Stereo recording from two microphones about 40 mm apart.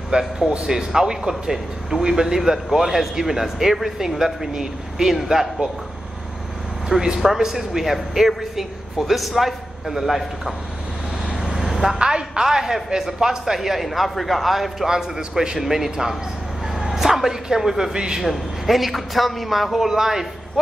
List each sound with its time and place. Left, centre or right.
0.1 s a man's voice: right; by 5.5 s centre
6.9 s speech: centre
11.4 s vehicle: centre
12.0 s speech: centre
14.9 s speech: centre
17.9 s a man's voice: centre
18.2 s speech: centre